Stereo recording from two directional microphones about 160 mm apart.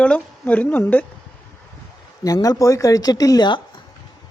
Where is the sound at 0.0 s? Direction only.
10° left (ahead or behind).